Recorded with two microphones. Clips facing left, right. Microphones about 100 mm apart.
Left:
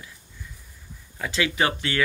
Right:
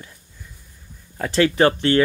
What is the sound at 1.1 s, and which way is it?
Speech, 45° right (ahead or behind).